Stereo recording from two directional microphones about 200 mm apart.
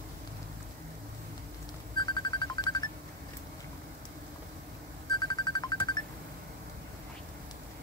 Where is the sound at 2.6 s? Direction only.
20° left (ahead or behind).